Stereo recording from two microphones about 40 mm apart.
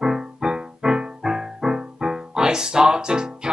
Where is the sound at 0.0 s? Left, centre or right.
Centre.